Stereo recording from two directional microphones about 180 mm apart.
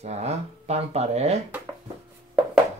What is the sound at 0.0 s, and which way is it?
Mantra, 35° right (ahead or behind).